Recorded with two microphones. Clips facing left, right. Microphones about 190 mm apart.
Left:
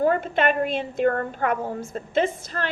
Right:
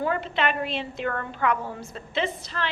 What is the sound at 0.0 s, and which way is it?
A woman's voice, 45° left (ahead or behind).